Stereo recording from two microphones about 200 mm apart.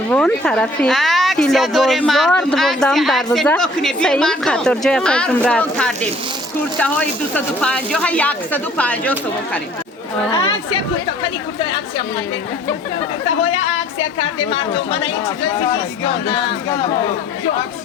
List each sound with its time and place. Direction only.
0.1 s speech: 5° left (ahead or behind)
11.2 s speech: 25° left (ahead or behind)
14.2 s speech: 25° left (ahead or behind)